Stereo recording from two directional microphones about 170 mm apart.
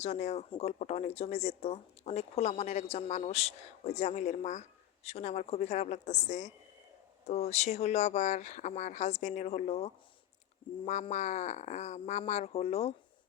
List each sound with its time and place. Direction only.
0.0 s speech: 40° left (ahead or behind)
11.1 s speech: 40° left (ahead or behind)